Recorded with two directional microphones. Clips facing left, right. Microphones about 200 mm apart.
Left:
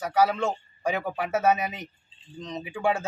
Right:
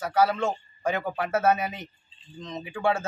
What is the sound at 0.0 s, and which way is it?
Speech, 10° left (ahead or behind).